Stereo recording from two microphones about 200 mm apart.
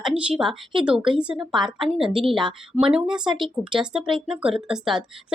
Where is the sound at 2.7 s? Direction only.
25° right (ahead or behind).